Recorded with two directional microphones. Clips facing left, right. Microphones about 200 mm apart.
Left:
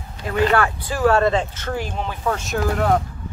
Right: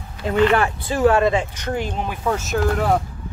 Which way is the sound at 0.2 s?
20° right (ahead or behind).